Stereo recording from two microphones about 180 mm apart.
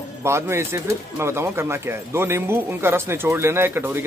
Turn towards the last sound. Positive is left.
turn(degrees=-10)  # may be behind; listen again after turning